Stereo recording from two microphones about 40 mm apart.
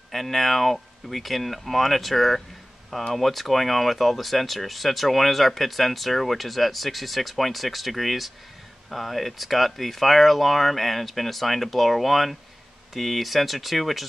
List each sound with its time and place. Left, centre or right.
0.1 s speech: centre